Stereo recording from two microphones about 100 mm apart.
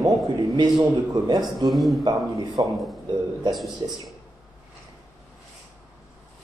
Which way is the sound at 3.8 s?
65° right (ahead or behind).